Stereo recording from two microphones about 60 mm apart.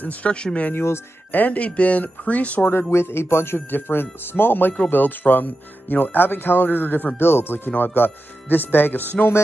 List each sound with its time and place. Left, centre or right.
0.0 s speech: left
0.7 s speech: left
1.3 s speech: left
2.9 s speech: left